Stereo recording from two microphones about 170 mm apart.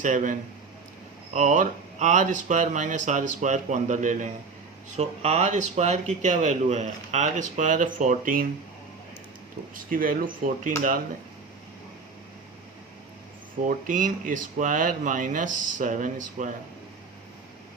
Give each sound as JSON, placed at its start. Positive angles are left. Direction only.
{"t": 0.0, "sound": "speech", "side_deg": -50}
{"t": 9.7, "sound": "speech", "side_deg": -55}
{"t": 13.7, "sound": "speech", "side_deg": -50}